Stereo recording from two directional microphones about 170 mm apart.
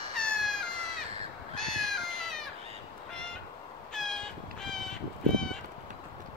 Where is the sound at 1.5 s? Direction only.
5° left (ahead or behind).